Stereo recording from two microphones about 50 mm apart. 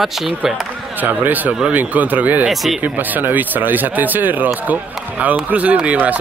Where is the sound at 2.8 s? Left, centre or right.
Right.